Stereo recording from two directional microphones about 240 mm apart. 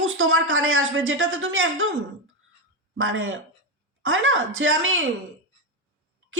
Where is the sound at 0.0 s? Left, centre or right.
Right.